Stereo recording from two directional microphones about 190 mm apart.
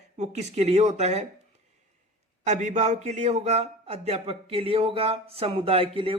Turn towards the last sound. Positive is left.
turn(degrees=-30)  # may be behind; listen again after turning